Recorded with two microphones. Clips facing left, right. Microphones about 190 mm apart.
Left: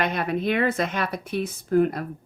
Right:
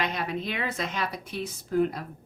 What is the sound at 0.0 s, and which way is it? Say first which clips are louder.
Speech: left 6 dB; 55° left (ahead or behind).